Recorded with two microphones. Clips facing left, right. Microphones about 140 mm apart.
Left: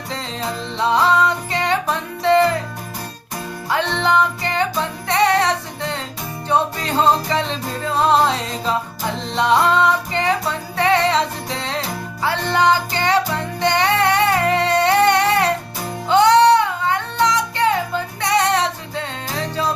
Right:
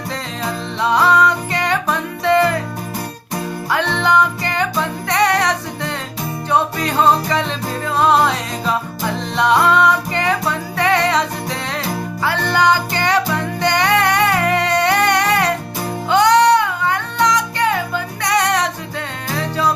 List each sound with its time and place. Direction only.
0.8 s music: 25° left (ahead or behind)
3.7 s music: 25° left (ahead or behind)